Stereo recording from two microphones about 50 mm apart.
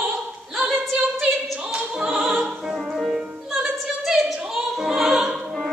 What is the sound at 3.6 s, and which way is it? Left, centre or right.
Opera, centre.